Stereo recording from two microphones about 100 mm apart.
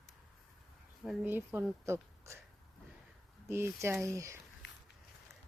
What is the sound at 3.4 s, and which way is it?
Speech, 25° right (ahead or behind).